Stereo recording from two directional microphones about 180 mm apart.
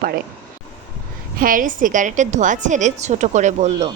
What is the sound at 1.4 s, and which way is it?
A woman's voice, 50° right (ahead or behind).